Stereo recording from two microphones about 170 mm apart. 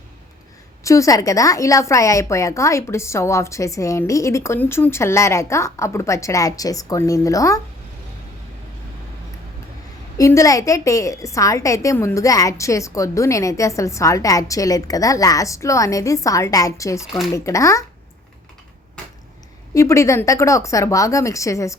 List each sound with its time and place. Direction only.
0.9 s a woman's voice: 20° left (ahead or behind)
10.2 s a woman's voice: 20° left (ahead or behind)
19.7 s a woman's voice: 15° left (ahead or behind)